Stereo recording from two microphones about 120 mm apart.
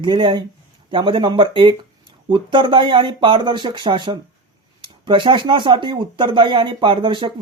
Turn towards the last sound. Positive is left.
turn(degrees=-40)  # may be behind; listen again after turning